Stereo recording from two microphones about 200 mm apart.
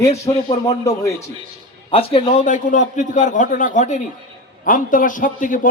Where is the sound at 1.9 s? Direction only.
25° left (ahead or behind).